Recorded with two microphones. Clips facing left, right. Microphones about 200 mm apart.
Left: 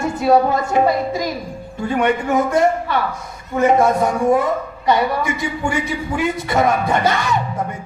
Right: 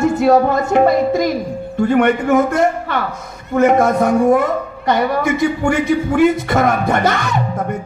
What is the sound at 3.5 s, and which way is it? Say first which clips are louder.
A man's voice: right 2 dB; 50° right (ahead or behind).